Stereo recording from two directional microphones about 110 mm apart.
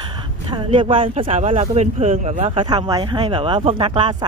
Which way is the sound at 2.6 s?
40° right (ahead or behind).